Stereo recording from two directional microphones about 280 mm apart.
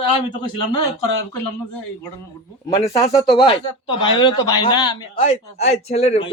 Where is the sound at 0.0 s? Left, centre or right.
Centre.